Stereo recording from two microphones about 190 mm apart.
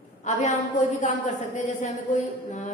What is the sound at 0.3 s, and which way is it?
Speech, 40° left (ahead or behind).